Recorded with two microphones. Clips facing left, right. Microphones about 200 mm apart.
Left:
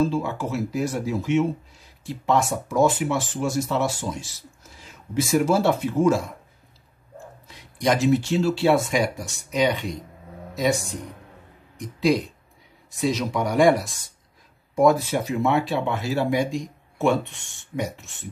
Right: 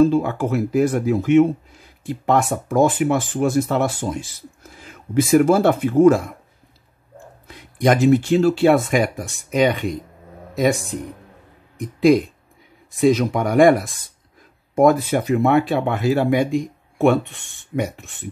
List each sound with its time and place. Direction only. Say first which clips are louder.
0.0 s speech: right 7 dB; 55° right (ahead or behind)
7.4 s speech: right 5 dB; 55° right (ahead or behind)
11.8 s speech: right 7 dB; 50° right (ahead or behind)